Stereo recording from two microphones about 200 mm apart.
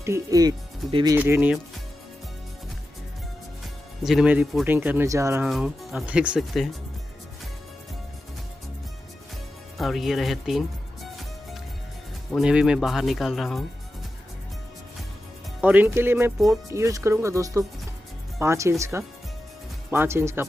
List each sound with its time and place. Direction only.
0.0 s speech: 15° right (ahead or behind)
1.2 s speech: 10° right (ahead or behind)
4.0 s speech: centre (ahead or behind)
5.5 s speech: centre (ahead or behind)
9.8 s speech: centre (ahead or behind)
12.3 s speech: 5° right (ahead or behind)
15.6 s speech: 10° right (ahead or behind)